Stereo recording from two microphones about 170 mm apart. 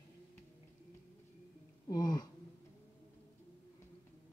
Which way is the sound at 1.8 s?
25° left (ahead or behind).